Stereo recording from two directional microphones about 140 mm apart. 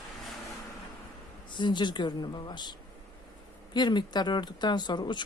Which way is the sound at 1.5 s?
35° left (ahead or behind).